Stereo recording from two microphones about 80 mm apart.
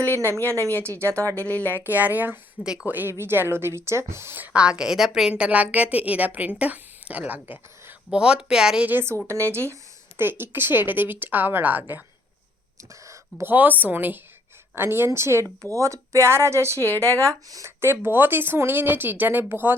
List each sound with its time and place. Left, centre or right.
0.1 s speech: right
1.5 s speech: left
1.8 s speech: right
4.5 s a woman's voice: centre
5.4 s a woman's voice: centre
8.2 s a woman's voice: centre
8.9 s speech: right
12.9 s a sound: right
13.5 s speech: right
17.9 s speech: right